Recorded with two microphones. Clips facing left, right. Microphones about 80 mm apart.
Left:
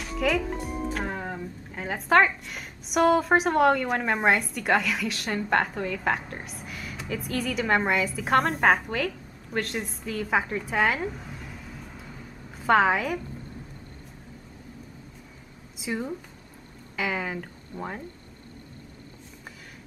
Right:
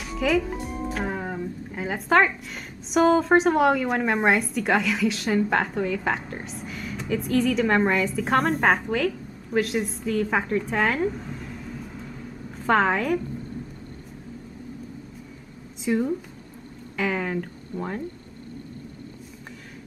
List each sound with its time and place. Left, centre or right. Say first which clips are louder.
0.0 s speech: right 3 dB; centre
15.8 s speech: right 7 dB; centre